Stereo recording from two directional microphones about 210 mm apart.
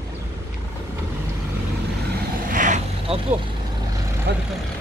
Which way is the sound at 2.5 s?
35° right (ahead or behind).